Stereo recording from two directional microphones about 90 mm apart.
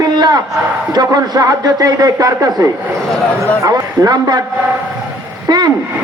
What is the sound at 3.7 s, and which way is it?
Speech, 45° right (ahead or behind).